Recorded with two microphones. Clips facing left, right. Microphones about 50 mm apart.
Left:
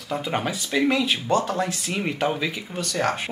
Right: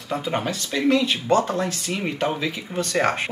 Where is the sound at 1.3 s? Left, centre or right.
Right.